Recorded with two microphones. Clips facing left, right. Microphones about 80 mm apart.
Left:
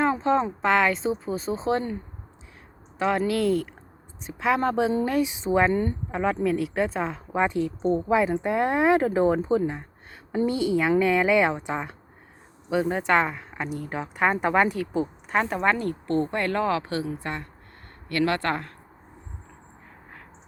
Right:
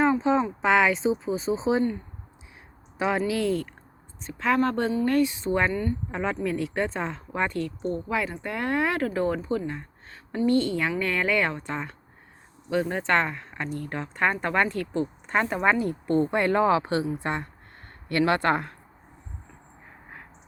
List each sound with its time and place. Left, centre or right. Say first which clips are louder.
0.0 s a sound: even; centre
0.6 s speech: right 1 dB; centre
3.0 s speech: left 2 dB; centre
5.7 s a woman's voice: left 3 dB; left
6.1 s a woman's voice: left 4 dB; centre
16.0 s speech: right 3 dB; centre